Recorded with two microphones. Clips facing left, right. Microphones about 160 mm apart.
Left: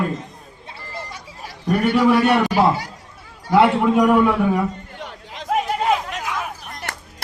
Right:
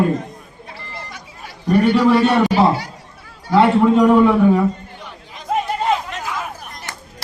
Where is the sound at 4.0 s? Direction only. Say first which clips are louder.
Right 2 dB; centre (ahead or behind).